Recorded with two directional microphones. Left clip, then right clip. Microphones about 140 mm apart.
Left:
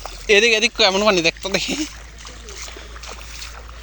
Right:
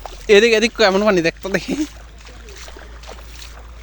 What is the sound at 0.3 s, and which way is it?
Speech, 85° right.